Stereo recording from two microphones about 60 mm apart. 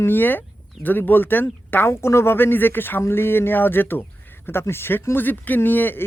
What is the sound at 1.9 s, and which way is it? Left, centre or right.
Speech, left.